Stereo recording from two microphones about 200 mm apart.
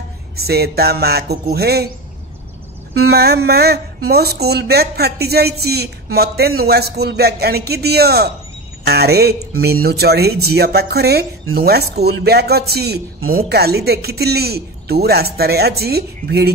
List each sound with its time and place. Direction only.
0.4 s speech: 50° right (ahead or behind)
3.1 s speech: 55° right (ahead or behind)